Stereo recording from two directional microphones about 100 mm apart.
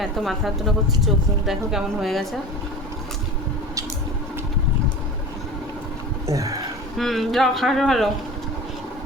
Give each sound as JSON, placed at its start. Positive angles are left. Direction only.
{"t": 0.0, "sound": "speech", "side_deg": 0}
{"t": 6.2, "sound": "a sound", "side_deg": -35}
{"t": 6.9, "sound": "speech", "side_deg": 0}